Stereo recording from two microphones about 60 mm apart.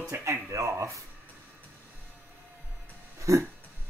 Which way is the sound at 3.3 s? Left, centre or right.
Right.